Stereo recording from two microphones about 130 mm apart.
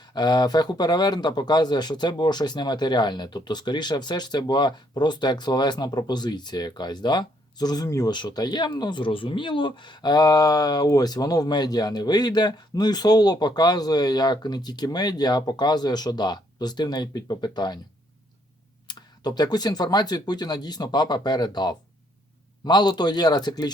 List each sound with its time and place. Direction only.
0.0 s speech: 35° left (ahead or behind)
18.9 s speech: 35° left (ahead or behind)